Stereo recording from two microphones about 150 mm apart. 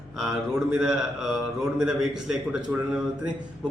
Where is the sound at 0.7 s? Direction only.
Centre (ahead or behind).